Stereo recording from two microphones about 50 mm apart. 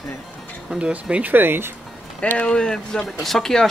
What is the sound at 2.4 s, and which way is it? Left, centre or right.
Speech, centre.